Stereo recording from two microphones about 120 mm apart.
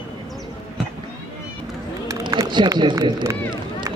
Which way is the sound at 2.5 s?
40° right (ahead or behind).